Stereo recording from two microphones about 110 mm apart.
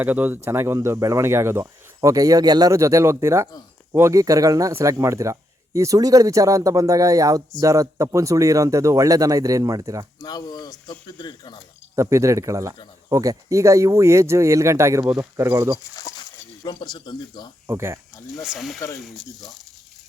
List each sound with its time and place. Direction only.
0.0 s a man's voice: 15° right (ahead or behind); by 10.1 s 30° right (ahead or behind)
10.2 s speech: 35° left (ahead or behind)
11.9 s speech: 30° right (ahead or behind)
16.0 s a sound: 35° left (ahead or behind)
16.6 s speech: 40° left (ahead or behind)
17.7 s speech: 25° right (ahead or behind)
18.3 s speech: centre (ahead or behind)